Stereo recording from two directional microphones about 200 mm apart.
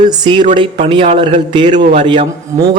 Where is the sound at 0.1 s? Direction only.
25° right (ahead or behind).